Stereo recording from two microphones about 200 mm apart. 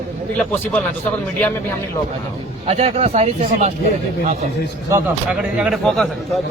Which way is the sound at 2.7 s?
30° right (ahead or behind).